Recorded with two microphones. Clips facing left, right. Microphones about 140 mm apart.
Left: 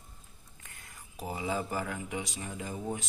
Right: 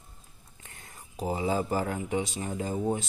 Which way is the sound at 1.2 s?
30° right (ahead or behind).